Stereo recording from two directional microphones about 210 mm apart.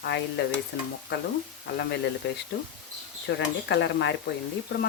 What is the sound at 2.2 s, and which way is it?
Speech, 60° left (ahead or behind).